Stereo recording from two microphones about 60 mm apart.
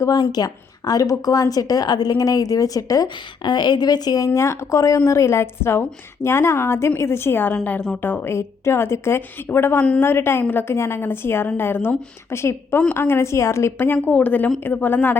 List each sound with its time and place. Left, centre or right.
0.0 s a woman's voice: left
3.8 s a woman's voice: left
4.3 s speech: left
7.5 s a woman's voice: centre
8.0 s a woman's voice: left
14.1 s a woman's voice: left